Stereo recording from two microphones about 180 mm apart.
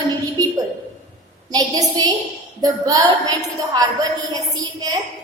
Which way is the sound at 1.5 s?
20° right (ahead or behind).